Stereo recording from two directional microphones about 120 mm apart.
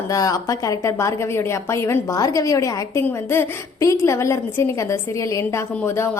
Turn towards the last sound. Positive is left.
turn(degrees=20)  # may be behind; listen again after turning